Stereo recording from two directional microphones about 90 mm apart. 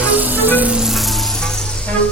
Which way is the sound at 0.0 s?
15° right (ahead or behind).